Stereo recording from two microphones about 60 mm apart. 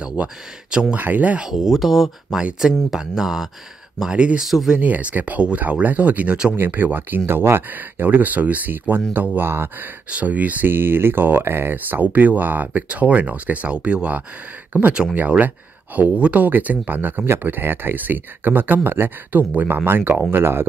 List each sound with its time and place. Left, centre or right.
0.0 s speech: centre
0.9 s speech: right
1.5 s speech: centre
4.5 s speech: centre
4.7 s speech: right
6.5 s speech: right